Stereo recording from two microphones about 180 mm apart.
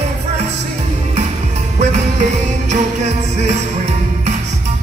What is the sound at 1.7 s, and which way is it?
Music, 40° right (ahead or behind).